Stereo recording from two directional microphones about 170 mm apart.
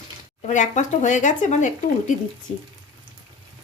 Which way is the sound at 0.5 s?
45° left (ahead or behind).